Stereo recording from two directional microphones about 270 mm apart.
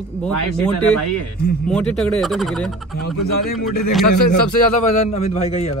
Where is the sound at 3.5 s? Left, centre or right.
Left.